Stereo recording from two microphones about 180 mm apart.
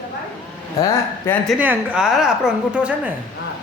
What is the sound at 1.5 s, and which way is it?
A woman's voice, 10° right (ahead or behind).